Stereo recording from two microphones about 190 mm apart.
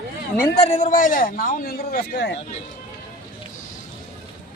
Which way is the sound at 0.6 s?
40° left (ahead or behind).